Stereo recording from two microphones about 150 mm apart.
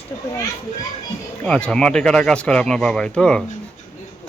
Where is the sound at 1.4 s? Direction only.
5° left (ahead or behind).